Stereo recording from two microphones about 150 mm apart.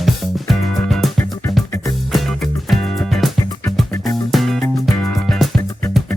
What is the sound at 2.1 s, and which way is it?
Music, centre (ahead or behind).